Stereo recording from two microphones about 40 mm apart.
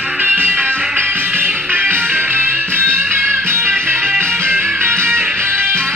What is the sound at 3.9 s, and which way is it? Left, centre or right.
Music, right.